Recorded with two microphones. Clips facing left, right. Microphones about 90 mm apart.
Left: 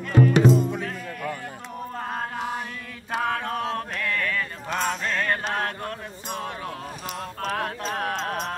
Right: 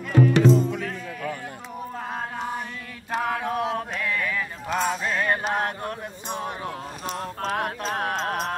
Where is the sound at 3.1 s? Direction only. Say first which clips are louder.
Right 1 dB; 5° right (ahead or behind); by 6.4 s 20° right (ahead or behind).